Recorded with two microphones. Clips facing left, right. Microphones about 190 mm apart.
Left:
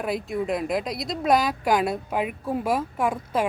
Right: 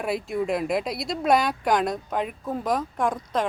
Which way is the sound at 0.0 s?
Centre (ahead or behind).